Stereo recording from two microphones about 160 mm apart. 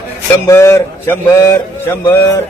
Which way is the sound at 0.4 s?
15° left (ahead or behind).